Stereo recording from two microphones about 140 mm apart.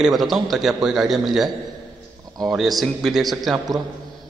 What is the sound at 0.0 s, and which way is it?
A man's voice, centre (ahead or behind).